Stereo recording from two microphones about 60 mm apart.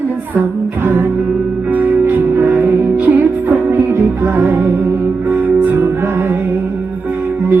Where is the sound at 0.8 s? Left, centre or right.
Right.